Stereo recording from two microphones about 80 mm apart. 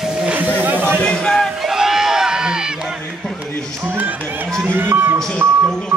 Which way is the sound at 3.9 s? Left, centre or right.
Right.